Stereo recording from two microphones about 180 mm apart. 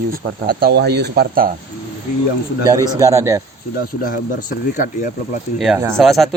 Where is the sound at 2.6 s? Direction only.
15° right (ahead or behind).